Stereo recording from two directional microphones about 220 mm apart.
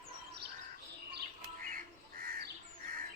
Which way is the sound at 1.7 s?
40° right (ahead or behind).